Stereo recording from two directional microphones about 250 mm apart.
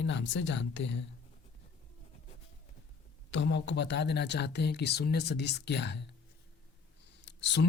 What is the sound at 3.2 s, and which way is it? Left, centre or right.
Speech, left.